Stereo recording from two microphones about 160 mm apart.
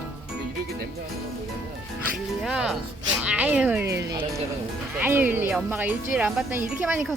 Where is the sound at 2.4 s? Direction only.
5° right (ahead or behind).